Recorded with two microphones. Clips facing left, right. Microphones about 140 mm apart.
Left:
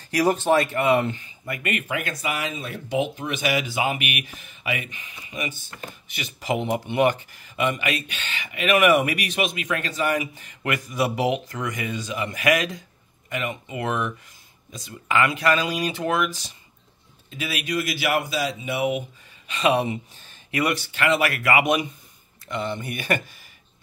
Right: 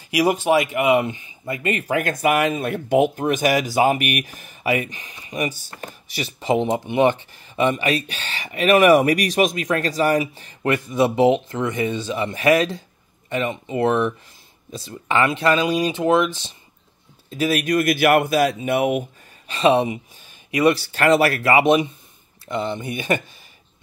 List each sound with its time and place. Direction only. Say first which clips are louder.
0.0 s speech: right 2 dB; 10° right (ahead or behind)
17.3 s speech: right 8 dB; 40° right (ahead or behind)
19.4 s speech: right 4 dB; 30° right (ahead or behind)